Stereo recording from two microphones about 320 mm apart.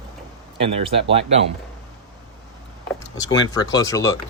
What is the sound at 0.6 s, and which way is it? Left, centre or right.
Speech, centre.